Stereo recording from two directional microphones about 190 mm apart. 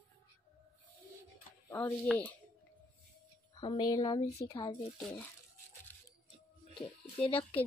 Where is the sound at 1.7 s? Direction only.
15° left (ahead or behind).